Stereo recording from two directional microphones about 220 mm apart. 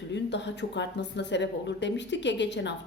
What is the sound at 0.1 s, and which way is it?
Speech, 50° left (ahead or behind).